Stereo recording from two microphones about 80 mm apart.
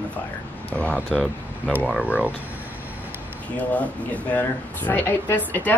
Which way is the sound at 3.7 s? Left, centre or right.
Centre.